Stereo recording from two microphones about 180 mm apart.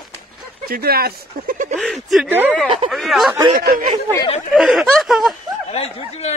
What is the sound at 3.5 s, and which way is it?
Speech, 55° right (ahead or behind).